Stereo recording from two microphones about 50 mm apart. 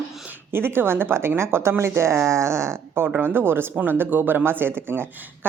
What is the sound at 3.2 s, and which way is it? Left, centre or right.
A woman's voice, right.